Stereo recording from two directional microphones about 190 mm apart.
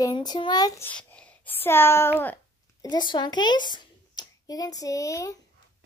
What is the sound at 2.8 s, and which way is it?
A child's voice, 25° left (ahead or behind).